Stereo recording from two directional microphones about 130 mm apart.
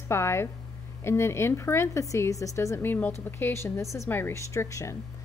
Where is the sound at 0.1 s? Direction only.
20° left (ahead or behind).